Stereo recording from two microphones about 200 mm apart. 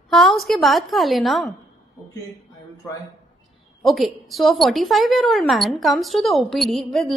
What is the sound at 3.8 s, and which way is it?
Speech, centre (ahead or behind).